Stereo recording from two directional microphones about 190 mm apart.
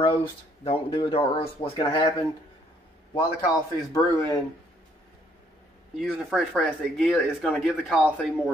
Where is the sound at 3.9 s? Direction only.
15° left (ahead or behind).